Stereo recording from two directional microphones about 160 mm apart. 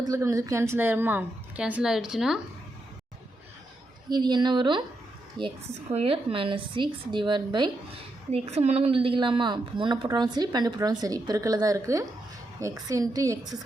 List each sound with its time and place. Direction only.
0.0 s a woman's voice: 20° right (ahead or behind); by 2.4 s 5° right (ahead or behind)
4.1 s speech: 30° right (ahead or behind)
8.3 s speech: 40° right (ahead or behind); by 13.6 s 20° right (ahead or behind)